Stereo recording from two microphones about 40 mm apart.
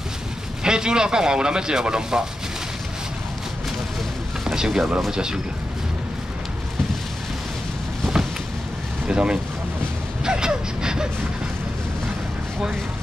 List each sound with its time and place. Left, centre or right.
0.7 s speech: centre
4.5 s speech: centre
9.0 s speech: right